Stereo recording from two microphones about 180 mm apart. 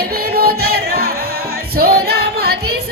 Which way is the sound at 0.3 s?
60° right (ahead or behind).